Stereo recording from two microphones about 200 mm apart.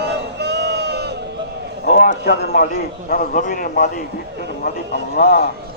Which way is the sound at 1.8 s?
45° left (ahead or behind).